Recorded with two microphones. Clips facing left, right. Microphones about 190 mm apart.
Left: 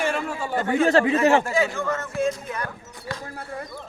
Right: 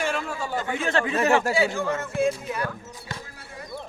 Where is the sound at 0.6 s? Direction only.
40° left (ahead or behind).